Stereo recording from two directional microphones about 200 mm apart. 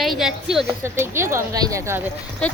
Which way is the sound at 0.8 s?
15° right (ahead or behind).